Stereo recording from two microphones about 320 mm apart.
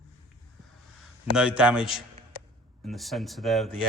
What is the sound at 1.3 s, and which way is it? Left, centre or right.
A man's voice, centre.